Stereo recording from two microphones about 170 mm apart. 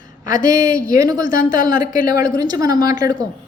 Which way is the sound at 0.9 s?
20° right (ahead or behind).